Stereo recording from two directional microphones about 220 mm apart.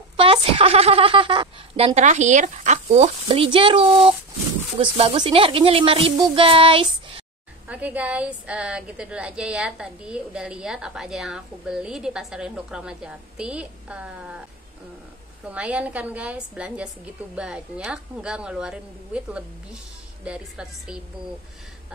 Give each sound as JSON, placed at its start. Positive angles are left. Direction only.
{"t": 0.2, "sound": "a woman's voice", "side_deg": -25}
{"t": 7.6, "sound": "a woman's voice", "side_deg": -5}
{"t": 15.4, "sound": "a woman's voice", "side_deg": -5}